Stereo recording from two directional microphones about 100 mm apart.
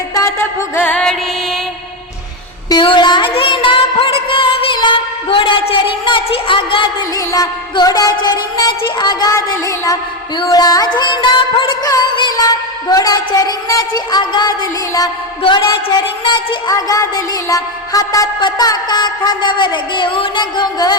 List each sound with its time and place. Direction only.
0.1 s music: 30° left (ahead or behind)
0.9 s music: 10° left (ahead or behind)
2.6 s a sound: 55° left (ahead or behind)
3.3 s music: 60° left (ahead or behind)
7.3 s a woman's voice: 40° left (ahead or behind)
9.3 s a woman's voice: 35° left (ahead or behind); by 11.8 s 60° left (ahead or behind)
12.4 s a woman's voice: 40° left (ahead or behind)
16.7 s a woman's voice: 35° left (ahead or behind)